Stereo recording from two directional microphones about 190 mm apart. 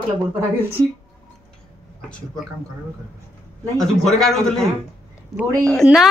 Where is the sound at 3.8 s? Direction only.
Centre (ahead or behind).